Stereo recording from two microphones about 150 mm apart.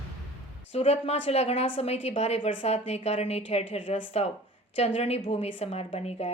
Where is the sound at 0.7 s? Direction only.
40° left (ahead or behind).